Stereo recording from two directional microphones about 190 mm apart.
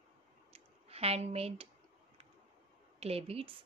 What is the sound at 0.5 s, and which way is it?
Clicking, 30° right (ahead or behind).